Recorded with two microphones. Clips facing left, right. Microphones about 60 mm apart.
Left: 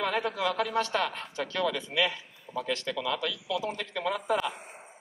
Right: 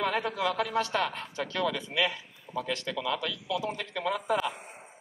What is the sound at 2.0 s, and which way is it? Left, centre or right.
A man's voice, centre.